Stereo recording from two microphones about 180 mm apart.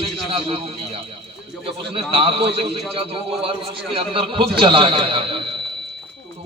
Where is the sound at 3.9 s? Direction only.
30° right (ahead or behind).